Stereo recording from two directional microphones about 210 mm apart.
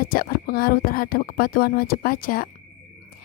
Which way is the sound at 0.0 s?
45° left (ahead or behind).